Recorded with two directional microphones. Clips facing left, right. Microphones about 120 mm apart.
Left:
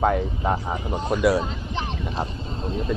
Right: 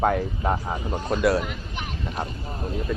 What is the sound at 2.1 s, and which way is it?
Speech, 25° left (ahead or behind).